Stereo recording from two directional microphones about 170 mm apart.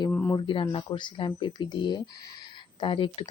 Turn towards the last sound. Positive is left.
turn(degrees=30)  # may be behind; listen again after turning